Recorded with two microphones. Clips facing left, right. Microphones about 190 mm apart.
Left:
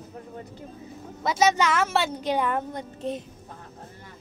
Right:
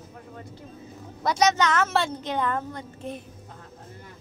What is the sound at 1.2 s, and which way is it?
A woman's voice, 5° left (ahead or behind).